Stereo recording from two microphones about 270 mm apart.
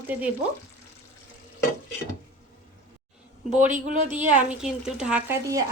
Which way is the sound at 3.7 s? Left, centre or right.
Right.